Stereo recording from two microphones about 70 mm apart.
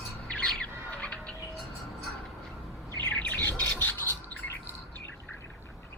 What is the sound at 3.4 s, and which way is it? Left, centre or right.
Bird, left.